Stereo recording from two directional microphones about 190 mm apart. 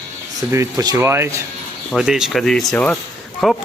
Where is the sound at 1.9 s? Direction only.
5° right (ahead or behind).